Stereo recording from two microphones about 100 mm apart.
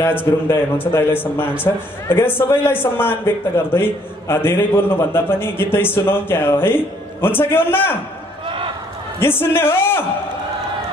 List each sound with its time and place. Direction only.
0.0 s a man's voice: 20° left (ahead or behind)
8.5 s run: 60° right (ahead or behind)
9.2 s a man's voice: 25° left (ahead or behind)